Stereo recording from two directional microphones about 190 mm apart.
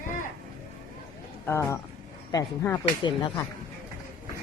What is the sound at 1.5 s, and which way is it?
Speech, 15° left (ahead or behind).